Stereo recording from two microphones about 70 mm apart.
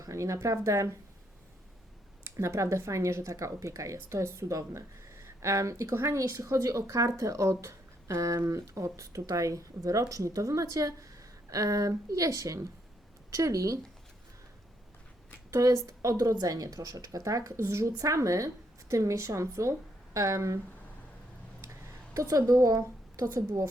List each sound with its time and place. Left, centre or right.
0.0 s speech: right
2.2 s speech: right
15.4 s a woman's voice: right
16.1 s speech: right
21.6 s a sound: right